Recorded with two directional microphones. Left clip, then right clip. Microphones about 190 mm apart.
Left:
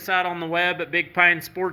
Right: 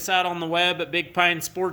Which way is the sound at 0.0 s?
10° right (ahead or behind).